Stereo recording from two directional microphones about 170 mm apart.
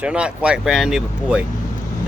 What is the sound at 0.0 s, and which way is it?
Speech, 5° right (ahead or behind).